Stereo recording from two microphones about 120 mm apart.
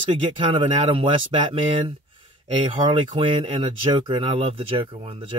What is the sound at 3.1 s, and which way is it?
Speech, 45° right (ahead or behind).